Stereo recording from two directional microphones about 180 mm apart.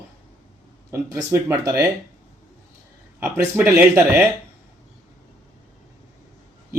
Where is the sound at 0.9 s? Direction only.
15° right (ahead or behind).